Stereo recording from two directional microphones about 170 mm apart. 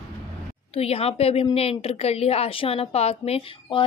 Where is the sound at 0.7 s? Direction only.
35° left (ahead or behind).